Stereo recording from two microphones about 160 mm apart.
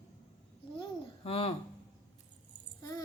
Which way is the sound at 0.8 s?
35° left (ahead or behind).